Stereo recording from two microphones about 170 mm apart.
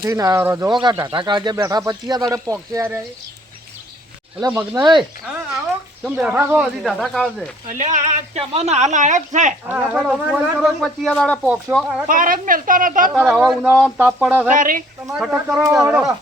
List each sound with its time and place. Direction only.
0.0 s speech: 20° right (ahead or behind)
4.4 s speech: 20° right (ahead or behind)
6.0 s speech: 5° right (ahead or behind)
7.7 s a woman's voice: 45° right (ahead or behind)
9.6 s speech: 10° right (ahead or behind)
12.0 s a woman's voice: 55° right (ahead or behind)
13.2 s speech: centre (ahead or behind)
14.5 s a woman's voice: 50° right (ahead or behind)
15.2 s speech: 5° right (ahead or behind)
15.7 s speech: 15° right (ahead or behind)